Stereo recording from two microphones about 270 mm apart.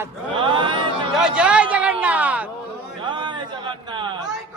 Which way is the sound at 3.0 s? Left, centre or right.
Centre.